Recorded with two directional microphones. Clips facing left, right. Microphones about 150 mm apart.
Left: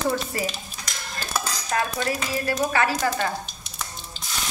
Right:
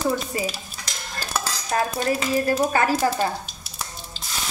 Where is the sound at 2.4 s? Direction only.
40° right (ahead or behind).